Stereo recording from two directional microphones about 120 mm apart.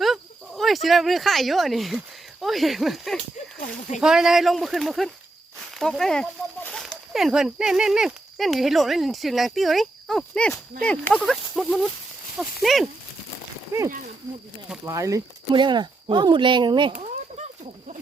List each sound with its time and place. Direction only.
0.0 s speech: centre (ahead or behind)
6.6 s a sound: 10° left (ahead or behind)
6.8 s speech: centre (ahead or behind)
13.7 s speech: 20° right (ahead or behind)
15.5 s speech: 40° right (ahead or behind)
16.9 s a sound: 70° right (ahead or behind)